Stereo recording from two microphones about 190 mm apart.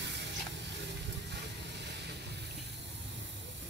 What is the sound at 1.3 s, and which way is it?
Vehicle, 65° right (ahead or behind).